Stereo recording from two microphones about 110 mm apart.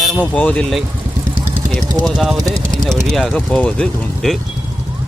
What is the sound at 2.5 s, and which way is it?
Speech, 30° right (ahead or behind).